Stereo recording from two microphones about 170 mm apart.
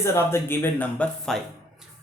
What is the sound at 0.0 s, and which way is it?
Speech, 15° left (ahead or behind).